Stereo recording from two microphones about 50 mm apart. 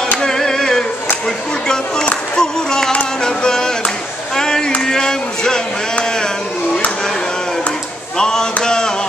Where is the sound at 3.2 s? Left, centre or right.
Centre.